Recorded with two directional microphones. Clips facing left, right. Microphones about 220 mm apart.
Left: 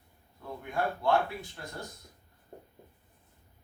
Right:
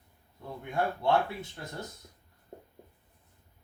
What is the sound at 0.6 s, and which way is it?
Speech, 20° right (ahead or behind).